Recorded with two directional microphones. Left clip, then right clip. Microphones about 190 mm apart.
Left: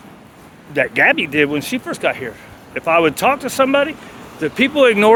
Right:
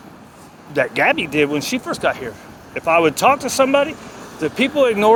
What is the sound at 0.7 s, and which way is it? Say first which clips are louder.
Speech: left 2 dB; 15° left (ahead or behind).